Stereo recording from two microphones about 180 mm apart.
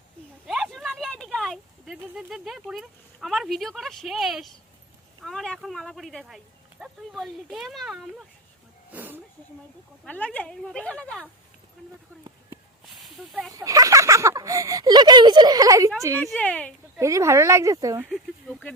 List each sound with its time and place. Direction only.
0.4 s speech: centre (ahead or behind)
10.0 s speech: 10° left (ahead or behind)
12.8 s a sound: centre (ahead or behind)
13.5 s speech: 20° right (ahead or behind)
16.2 s speech: 5° left (ahead or behind)
17.0 s speech: 15° right (ahead or behind)
18.1 s speech: 5° left (ahead or behind)